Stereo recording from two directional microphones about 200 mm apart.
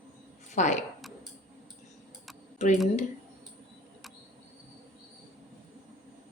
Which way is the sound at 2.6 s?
35° left (ahead or behind).